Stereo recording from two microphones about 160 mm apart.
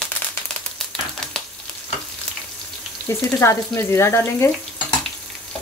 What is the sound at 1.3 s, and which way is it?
Frying, 5° left (ahead or behind).